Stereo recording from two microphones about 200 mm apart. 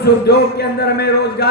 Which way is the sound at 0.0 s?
55° left (ahead or behind).